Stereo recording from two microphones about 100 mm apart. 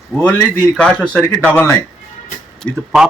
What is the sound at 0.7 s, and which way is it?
Speech, 5° left (ahead or behind).